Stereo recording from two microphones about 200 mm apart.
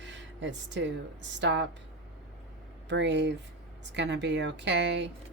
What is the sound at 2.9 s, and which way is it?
Speech, 65° right (ahead or behind).